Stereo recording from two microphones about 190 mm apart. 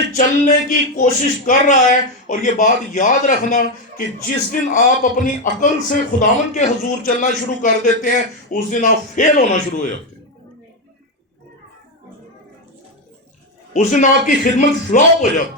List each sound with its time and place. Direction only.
0.2 s a man's voice: 40° left (ahead or behind)
13.7 s a man's voice: 40° left (ahead or behind)